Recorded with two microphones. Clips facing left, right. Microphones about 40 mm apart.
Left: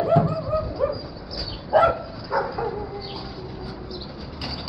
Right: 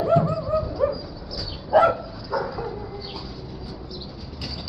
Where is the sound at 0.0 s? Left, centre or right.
Centre.